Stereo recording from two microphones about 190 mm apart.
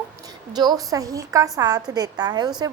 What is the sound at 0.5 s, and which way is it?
A woman's voice, 20° right (ahead or behind).